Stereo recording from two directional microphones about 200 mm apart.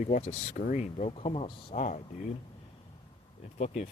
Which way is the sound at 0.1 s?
35° left (ahead or behind).